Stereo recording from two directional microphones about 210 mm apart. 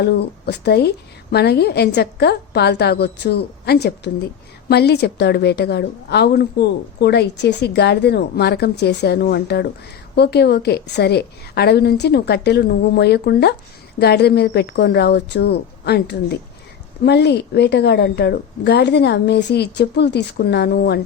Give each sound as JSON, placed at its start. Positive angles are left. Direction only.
{"t": 0.0, "sound": "a woman's voice", "side_deg": 50}